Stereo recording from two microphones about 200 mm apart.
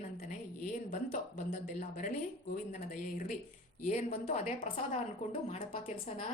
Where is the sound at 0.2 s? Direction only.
40° left (ahead or behind).